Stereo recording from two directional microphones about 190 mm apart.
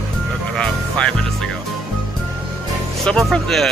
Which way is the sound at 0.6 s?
5° left (ahead or behind).